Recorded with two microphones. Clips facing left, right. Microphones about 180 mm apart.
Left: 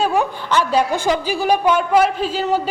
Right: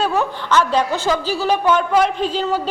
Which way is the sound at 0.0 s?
15° left (ahead or behind).